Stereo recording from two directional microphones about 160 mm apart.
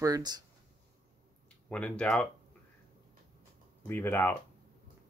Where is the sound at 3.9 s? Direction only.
15° left (ahead or behind).